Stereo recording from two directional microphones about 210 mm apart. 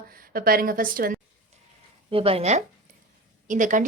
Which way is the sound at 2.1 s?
25° right (ahead or behind).